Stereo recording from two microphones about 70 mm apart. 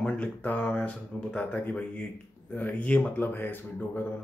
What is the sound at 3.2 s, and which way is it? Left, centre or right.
Speech, left.